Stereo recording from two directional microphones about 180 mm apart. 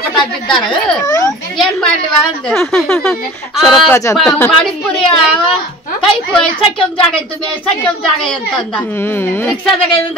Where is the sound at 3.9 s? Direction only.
15° left (ahead or behind).